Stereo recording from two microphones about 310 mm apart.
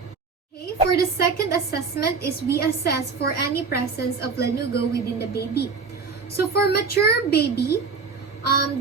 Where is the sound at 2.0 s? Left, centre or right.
Left.